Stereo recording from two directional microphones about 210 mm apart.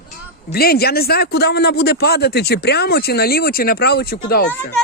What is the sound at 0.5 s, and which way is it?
A man's voice, 45° left (ahead or behind).